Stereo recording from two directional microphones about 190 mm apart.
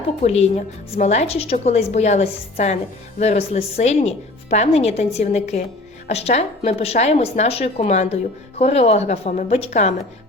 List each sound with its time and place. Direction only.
0.2 s a woman's voice: 35° left (ahead or behind)